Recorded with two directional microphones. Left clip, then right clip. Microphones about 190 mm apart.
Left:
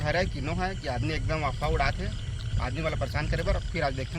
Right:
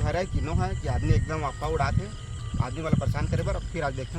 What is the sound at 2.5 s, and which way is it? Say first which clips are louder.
Speech: even; 10° right (ahead or behind).